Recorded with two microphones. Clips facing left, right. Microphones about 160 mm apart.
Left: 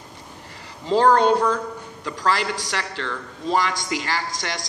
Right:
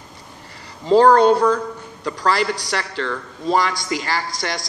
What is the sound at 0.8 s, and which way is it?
Speech, 40° right (ahead or behind).